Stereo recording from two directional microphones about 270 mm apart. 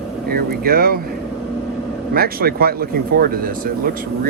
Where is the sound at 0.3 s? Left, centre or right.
Right.